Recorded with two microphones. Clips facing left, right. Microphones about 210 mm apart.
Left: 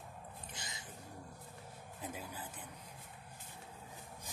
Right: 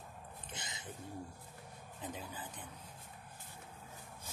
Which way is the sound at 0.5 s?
25° right (ahead or behind).